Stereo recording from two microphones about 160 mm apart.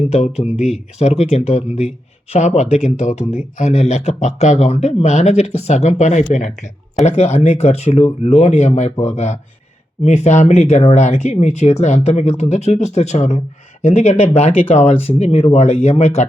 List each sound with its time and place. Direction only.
0.1 s speech: 40° left (ahead or behind)
0.4 s speech: 5° right (ahead or behind)
0.9 s speech: 45° left (ahead or behind)